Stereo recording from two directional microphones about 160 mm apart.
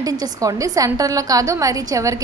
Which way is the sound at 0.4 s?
20° right (ahead or behind).